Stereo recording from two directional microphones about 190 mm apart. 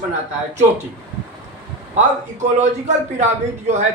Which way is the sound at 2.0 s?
40° right (ahead or behind).